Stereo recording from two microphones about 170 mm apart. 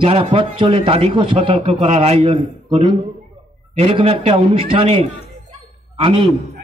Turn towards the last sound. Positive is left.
turn(degrees=-35)  # may be behind; listen again after turning